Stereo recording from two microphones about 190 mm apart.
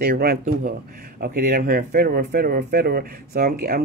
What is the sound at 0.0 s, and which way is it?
Speech, 55° right (ahead or behind).